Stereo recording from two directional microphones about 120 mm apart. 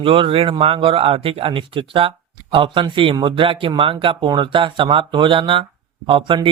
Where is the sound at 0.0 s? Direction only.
50° right (ahead or behind).